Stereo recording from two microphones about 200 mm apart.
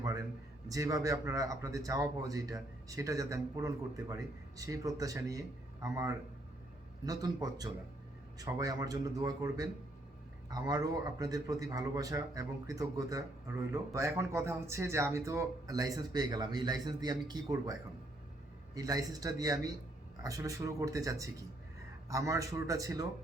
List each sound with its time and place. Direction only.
0.7 s a man's voice: 15° right (ahead or behind)